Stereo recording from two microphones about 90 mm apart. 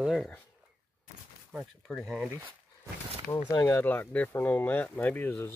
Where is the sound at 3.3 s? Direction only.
40° left (ahead or behind).